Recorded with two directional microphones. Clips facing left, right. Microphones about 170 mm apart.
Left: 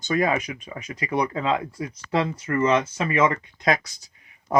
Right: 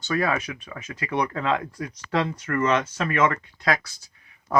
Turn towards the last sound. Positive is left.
turn(degrees=20)  # may be behind; listen again after turning